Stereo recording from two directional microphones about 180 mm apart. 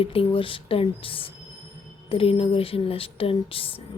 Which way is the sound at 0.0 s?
30° left (ahead or behind).